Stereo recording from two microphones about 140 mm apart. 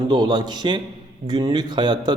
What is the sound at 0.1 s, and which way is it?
A man's voice, 30° right (ahead or behind).